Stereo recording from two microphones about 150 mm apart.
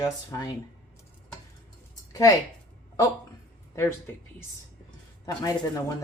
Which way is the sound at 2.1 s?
20° left (ahead or behind).